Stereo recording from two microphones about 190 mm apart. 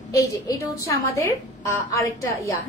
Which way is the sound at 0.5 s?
15° left (ahead or behind).